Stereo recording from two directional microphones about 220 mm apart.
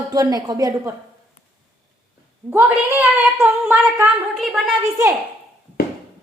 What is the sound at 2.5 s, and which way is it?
A woman's voice, 10° right (ahead or behind).